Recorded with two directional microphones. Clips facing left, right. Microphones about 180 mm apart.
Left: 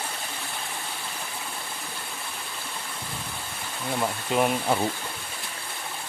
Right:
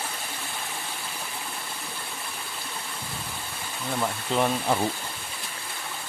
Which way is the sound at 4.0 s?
10° left (ahead or behind).